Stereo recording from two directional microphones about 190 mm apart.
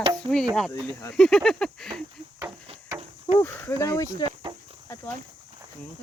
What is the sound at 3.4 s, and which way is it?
Speech, 10° left (ahead or behind).